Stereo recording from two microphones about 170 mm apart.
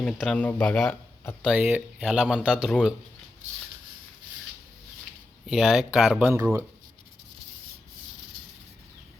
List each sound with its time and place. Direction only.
0.0 s speech: 5° left (ahead or behind)
1.5 s speech: 5° right (ahead or behind)
5.5 s speech: centre (ahead or behind)
6.3 s speech: 15° right (ahead or behind)